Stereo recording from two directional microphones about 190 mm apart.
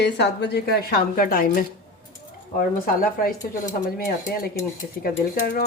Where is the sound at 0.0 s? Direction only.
65° left (ahead or behind).